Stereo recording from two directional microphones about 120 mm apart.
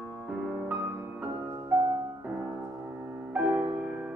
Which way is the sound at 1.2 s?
20° right (ahead or behind).